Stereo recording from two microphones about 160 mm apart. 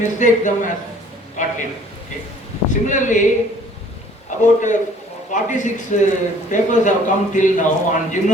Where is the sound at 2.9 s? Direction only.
50° left (ahead or behind).